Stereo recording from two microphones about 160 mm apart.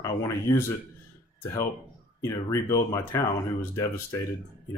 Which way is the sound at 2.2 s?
20° left (ahead or behind).